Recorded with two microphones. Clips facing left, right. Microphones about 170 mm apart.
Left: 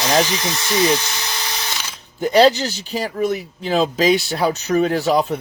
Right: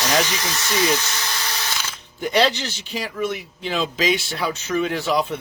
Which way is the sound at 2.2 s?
40° left (ahead or behind).